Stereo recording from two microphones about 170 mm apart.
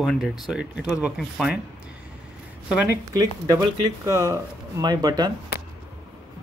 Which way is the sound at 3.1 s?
20° right (ahead or behind).